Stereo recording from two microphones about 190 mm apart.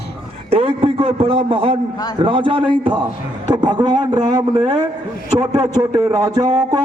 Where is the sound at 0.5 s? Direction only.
30° right (ahead or behind).